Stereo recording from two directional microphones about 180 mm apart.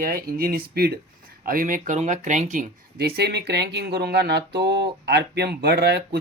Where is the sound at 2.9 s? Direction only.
65° right (ahead or behind).